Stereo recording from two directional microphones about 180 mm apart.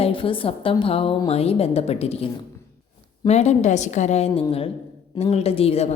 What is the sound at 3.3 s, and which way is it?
A woman's voice, 35° left (ahead or behind).